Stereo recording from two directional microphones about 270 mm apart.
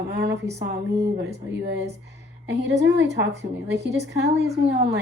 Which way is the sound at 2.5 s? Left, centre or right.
Right.